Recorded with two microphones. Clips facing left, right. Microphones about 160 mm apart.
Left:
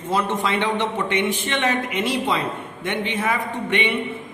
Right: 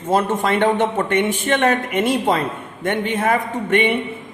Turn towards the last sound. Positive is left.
turn(degrees=-50)  # may be behind; listen again after turning